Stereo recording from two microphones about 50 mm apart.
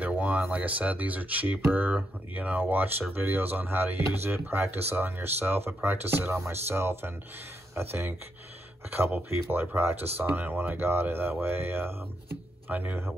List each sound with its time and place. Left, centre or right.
0.0 s a sound: right
0.4 s speech: right
6.5 s speech: right
9.1 s speech: right
10.8 s speech: right
12.6 s speech: right